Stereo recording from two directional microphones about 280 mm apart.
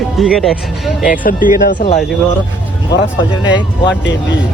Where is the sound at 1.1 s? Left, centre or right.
Left.